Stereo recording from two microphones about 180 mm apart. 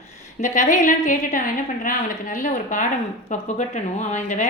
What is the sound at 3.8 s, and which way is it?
Speech, 40° left (ahead or behind).